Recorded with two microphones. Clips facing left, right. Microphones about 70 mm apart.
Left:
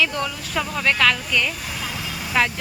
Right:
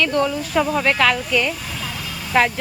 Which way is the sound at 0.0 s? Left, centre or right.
Centre.